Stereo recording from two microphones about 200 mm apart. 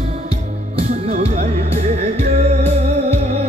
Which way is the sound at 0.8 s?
30° right (ahead or behind).